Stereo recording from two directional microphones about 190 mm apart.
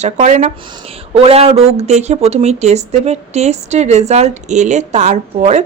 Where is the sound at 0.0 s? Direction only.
35° right (ahead or behind).